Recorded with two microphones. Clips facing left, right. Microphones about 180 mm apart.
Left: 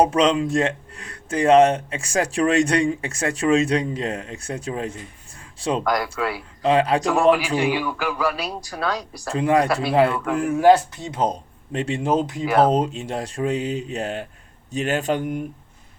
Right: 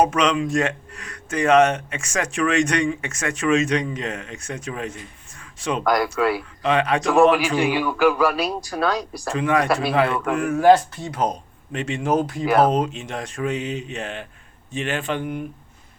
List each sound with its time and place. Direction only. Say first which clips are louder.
0.0 s speech: left 2 dB; 30° left (ahead or behind)
5.4 s a sound: left 2 dB; 30° left (ahead or behind)
5.8 s speech: right 3 dB; 55° right (ahead or behind)
6.6 s speech: left 4 dB; 30° left (ahead or behind)
7.6 s speech: right 4 dB; 55° right (ahead or behind)
9.3 s speech: left 1 dB; 35° left (ahead or behind)